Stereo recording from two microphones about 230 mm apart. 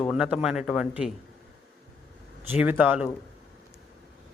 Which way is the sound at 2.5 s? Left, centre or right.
Centre.